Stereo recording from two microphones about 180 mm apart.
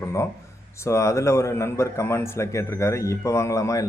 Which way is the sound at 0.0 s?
15° left (ahead or behind).